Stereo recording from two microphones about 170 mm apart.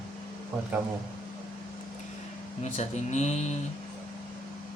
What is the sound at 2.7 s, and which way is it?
Speech, 40° left (ahead or behind).